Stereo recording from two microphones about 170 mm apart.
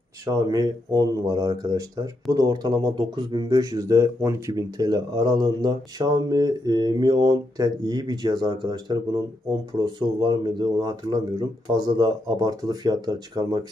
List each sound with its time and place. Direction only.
0.3 s speech: 20° right (ahead or behind)